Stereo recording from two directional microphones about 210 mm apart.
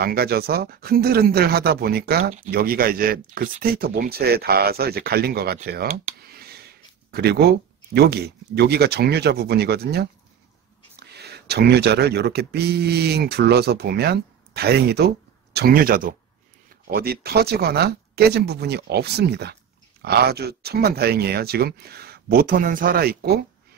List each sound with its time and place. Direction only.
0.0 s speech: 45° right (ahead or behind)
6.2 s a sound: 45° right (ahead or behind)
7.1 s speech: 50° right (ahead or behind)